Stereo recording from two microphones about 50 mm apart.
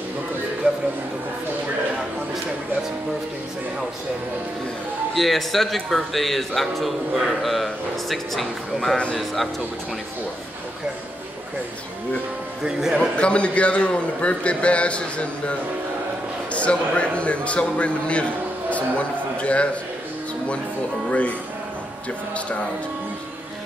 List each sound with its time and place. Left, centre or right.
5.1 s a man's voice: centre
13.2 s a man's voice: left
21.1 s a man's voice: left